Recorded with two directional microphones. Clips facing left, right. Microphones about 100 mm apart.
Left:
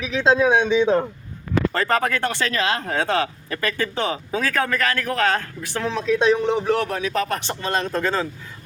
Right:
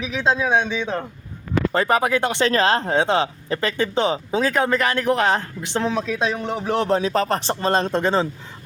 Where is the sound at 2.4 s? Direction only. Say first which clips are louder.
Right 5 dB; 35° right (ahead or behind).